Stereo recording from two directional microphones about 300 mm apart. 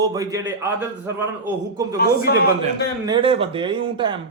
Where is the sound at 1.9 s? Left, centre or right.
Left.